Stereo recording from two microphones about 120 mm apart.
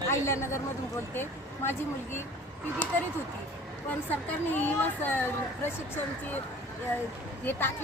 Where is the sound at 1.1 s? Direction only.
20° left (ahead or behind).